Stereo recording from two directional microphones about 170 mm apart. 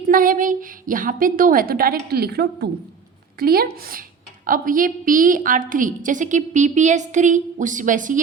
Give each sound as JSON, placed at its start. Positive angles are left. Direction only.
{"t": 0.1, "sound": "a woman's voice", "side_deg": -55}
{"t": 3.3, "sound": "a woman's voice", "side_deg": -60}